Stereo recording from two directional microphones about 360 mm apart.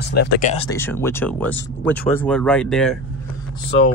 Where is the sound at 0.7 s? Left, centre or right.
Centre.